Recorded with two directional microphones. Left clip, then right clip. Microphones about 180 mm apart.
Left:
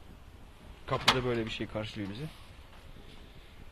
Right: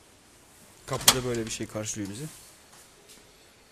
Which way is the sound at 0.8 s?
20° right (ahead or behind).